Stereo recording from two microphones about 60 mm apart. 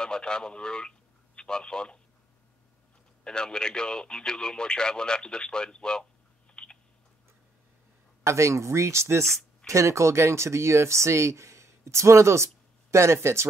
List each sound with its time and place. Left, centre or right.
0.0 s speech: centre
3.3 s speech: centre
6.5 s a sound: centre
8.2 s speech: right